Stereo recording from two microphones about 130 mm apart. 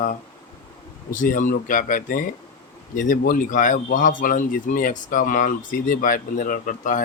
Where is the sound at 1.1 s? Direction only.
85° left.